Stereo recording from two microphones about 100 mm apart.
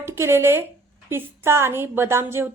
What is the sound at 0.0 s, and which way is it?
A woman's voice, 25° right (ahead or behind).